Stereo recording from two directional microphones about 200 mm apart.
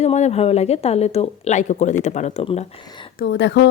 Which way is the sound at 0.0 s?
35° left (ahead or behind).